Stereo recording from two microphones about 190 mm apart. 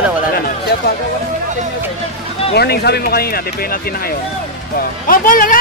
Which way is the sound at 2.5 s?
55° left (ahead or behind).